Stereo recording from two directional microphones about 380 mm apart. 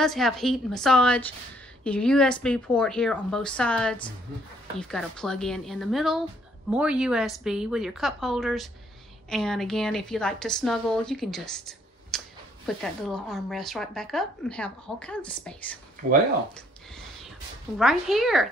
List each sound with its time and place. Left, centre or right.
0.0 s speech: centre
16.5 s a sound: centre
17.7 s speech: centre